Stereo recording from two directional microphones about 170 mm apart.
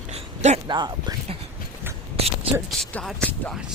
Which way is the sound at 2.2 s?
35° right (ahead or behind).